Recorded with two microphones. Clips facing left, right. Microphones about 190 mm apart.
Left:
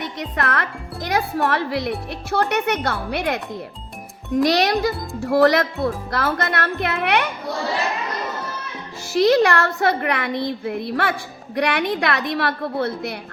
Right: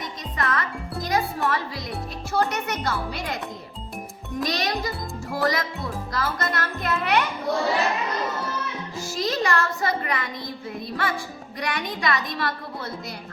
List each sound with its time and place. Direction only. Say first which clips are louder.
0.0 s music: left 4 dB; 65° left (ahead or behind)
2.5 s a child's voice: left 6 dB; 65° left (ahead or behind)
4.4 s a child's voice: left 7 dB; 70° left (ahead or behind)
9.1 s a child's voice: left 9 dB; 65° left (ahead or behind)